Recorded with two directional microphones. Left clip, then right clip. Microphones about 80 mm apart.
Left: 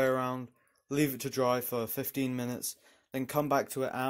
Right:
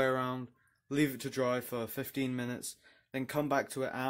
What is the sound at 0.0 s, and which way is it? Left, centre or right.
Speech, centre.